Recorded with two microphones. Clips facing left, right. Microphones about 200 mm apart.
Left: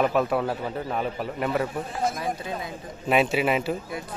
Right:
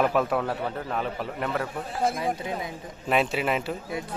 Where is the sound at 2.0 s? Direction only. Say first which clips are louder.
Right 3 dB; 25° right (ahead or behind).